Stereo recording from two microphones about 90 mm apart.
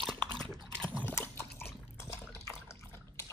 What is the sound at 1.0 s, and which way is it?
Dog, 25° left (ahead or behind).